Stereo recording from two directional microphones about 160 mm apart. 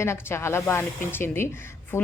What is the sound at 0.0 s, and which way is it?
A woman's voice, 15° left (ahead or behind).